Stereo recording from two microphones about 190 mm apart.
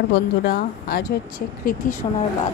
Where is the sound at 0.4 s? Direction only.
55° left (ahead or behind).